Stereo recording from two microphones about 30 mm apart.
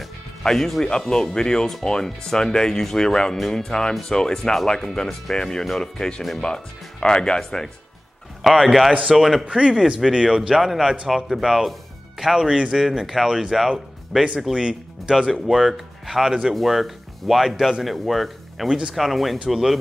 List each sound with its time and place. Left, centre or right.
0.4 s speech: centre
3.3 s speech: centre
3.6 s speech: left
8.4 s speech: centre
9.5 s speech: right
9.8 s speech: centre
10.1 s speech: right
10.5 s speech: centre
14.1 s speech: centre
14.5 s speech: right
15.5 s speech: centre